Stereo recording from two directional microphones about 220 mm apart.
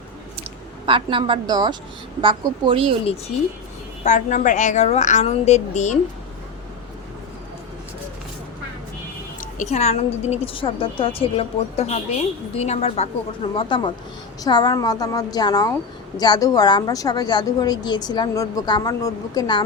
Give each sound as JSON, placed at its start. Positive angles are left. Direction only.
{"t": 0.9, "sound": "a woman's voice", "side_deg": -25}
{"t": 3.0, "sound": "a woman's voice", "side_deg": 25}
{"t": 9.4, "sound": "a woman's voice", "side_deg": 35}